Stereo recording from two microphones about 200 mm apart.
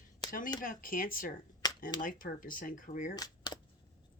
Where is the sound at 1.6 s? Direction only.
20° left (ahead or behind).